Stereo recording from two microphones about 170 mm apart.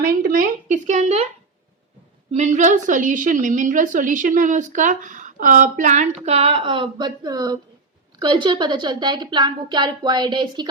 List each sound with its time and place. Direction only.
0.0 s a woman's voice: 60° right (ahead or behind); by 1.3 s 40° right (ahead or behind)
2.3 s a woman's voice: 45° right (ahead or behind); by 10.7 s 25° right (ahead or behind)